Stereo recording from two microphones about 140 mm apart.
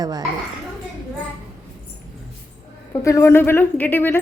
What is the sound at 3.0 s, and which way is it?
Speech, 20° left (ahead or behind).